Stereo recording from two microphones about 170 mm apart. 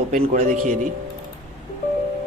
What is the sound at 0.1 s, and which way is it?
Speech, 45° right (ahead or behind).